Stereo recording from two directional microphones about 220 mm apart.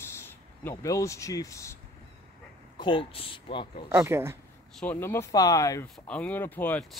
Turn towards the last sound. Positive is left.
turn(degrees=5)  # may be behind; listen again after turning